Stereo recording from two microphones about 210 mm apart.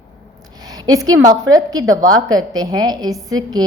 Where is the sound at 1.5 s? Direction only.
15° right (ahead or behind).